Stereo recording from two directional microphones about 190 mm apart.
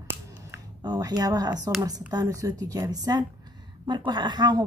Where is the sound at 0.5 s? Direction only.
20° right (ahead or behind).